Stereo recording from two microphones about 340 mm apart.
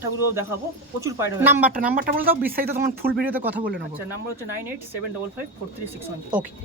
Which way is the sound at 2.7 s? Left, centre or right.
Right.